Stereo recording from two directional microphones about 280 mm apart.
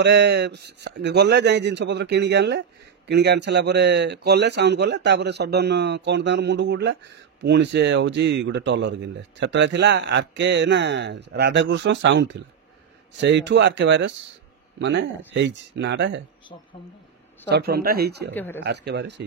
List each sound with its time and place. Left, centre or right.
0.0 s speech: right
17.5 s speech: right
18.3 s speech: centre
18.6 s speech: right